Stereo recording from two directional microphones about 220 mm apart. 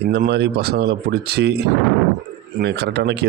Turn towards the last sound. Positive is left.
turn(degrees=-50)  # may be behind; listen again after turning